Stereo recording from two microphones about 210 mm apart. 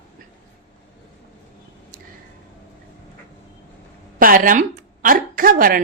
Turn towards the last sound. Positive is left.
turn(degrees=-40)  # may be behind; listen again after turning